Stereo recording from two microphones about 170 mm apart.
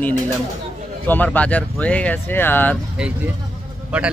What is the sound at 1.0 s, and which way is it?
Speech, 10° left (ahead or behind).